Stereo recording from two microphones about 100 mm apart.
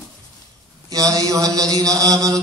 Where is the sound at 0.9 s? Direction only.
35° right (ahead or behind).